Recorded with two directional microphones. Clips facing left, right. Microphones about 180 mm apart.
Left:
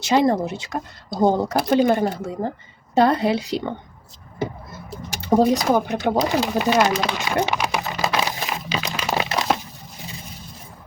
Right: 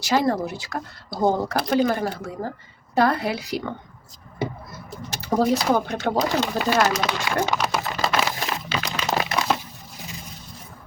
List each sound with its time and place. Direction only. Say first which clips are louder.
0.0 s speech: left 3 dB; 20° left (ahead or behind)
5.2 s speech: left 3 dB; 20° left (ahead or behind)
7.0 s a sound: left 2 dB; 20° left (ahead or behind)